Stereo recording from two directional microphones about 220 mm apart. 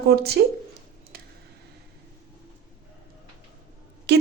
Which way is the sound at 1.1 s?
45° right (ahead or behind).